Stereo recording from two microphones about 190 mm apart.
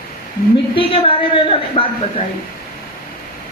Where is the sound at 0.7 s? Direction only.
30° left (ahead or behind).